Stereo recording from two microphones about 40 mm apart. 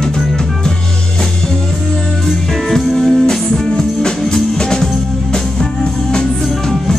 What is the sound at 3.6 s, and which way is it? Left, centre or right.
Music, centre.